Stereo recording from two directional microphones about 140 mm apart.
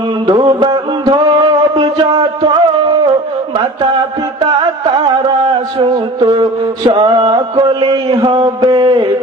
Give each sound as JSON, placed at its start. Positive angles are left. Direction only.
{"t": 0.3, "sound": "mantra", "side_deg": -30}
{"t": 5.8, "sound": "music", "side_deg": -35}